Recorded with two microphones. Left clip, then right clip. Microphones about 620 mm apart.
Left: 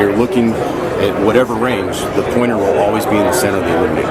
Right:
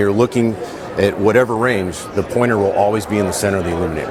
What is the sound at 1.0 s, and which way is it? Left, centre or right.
Speech, right.